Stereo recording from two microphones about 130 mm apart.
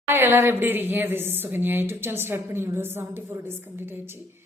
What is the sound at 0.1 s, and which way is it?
Speech, 20° right (ahead or behind).